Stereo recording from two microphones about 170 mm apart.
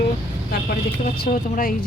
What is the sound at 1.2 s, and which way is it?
Speech, 55° left (ahead or behind).